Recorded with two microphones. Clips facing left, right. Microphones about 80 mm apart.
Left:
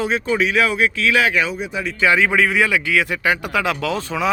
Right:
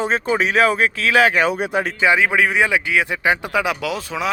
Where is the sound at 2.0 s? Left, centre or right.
Centre.